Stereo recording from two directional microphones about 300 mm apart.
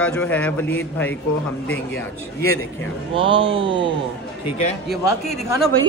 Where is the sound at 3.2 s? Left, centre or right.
Centre.